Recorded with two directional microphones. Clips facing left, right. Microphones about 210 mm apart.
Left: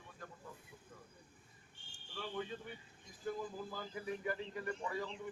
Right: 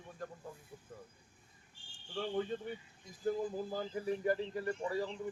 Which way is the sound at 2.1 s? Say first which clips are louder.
Right 7 dB; 45° right (ahead or behind).